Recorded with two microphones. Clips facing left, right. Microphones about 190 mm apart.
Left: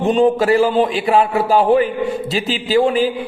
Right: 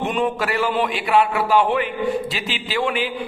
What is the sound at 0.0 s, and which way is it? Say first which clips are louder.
A man's voice: left 8 dB; 30° left (ahead or behind).